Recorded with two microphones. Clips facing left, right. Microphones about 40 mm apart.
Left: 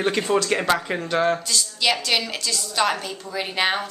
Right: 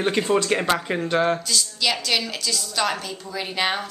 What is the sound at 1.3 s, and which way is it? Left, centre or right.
Speech, centre.